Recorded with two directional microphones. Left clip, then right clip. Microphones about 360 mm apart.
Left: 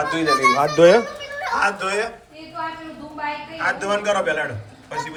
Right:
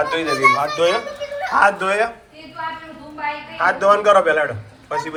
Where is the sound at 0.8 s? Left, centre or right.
Left.